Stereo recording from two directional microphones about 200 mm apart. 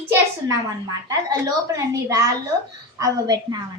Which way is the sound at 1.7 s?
15° right (ahead or behind).